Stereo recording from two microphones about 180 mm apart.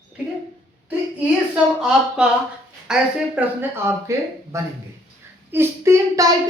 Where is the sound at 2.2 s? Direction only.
5° right (ahead or behind).